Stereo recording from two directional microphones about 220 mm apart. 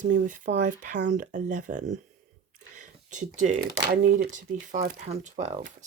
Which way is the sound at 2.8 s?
35° right (ahead or behind).